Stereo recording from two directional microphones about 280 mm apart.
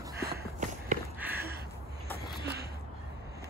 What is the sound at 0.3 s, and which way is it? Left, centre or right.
Walk, right.